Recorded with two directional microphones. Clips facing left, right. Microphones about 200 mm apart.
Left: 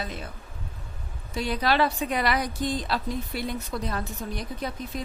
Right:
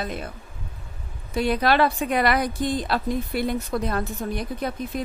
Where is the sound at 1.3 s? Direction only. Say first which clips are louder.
Right 5 dB; 55° right (ahead or behind).